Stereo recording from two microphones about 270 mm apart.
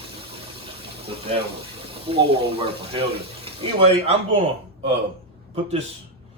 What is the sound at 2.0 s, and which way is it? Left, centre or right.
Speech, centre.